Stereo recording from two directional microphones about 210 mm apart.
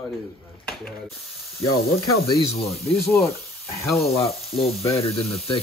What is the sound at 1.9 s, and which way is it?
Speech, 50° left (ahead or behind).